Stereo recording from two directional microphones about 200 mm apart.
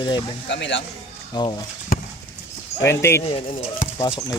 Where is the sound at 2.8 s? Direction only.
15° left (ahead or behind).